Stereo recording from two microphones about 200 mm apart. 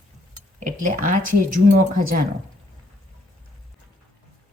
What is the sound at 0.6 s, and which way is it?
A woman's voice, 40° right (ahead or behind).